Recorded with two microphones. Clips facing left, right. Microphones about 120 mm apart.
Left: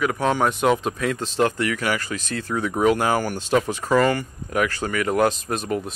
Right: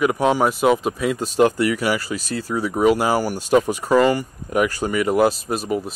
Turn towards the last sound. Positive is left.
turn(degrees=-5)  # may be behind; listen again after turning